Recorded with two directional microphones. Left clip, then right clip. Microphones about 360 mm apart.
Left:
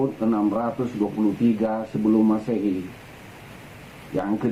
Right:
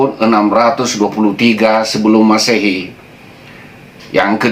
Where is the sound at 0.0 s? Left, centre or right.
Centre.